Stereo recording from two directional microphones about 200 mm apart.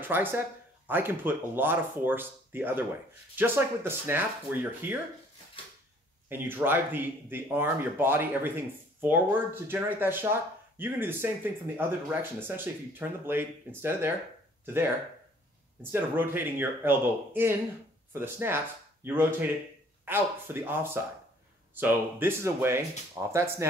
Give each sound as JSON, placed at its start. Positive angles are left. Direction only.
{"t": 0.0, "sound": "speech", "side_deg": -10}
{"t": 6.2, "sound": "speech", "side_deg": -10}
{"t": 15.8, "sound": "speech", "side_deg": -10}